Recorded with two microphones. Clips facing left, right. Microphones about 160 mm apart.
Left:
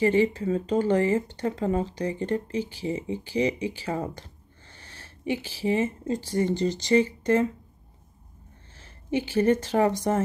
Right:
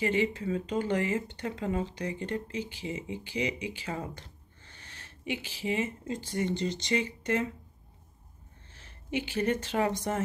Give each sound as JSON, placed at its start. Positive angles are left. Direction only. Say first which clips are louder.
{"t": 0.0, "sound": "speech", "louder": "left 7 dB", "side_deg": 40}
{"t": 8.8, "sound": "a woman's voice", "louder": "left 6 dB", "side_deg": 40}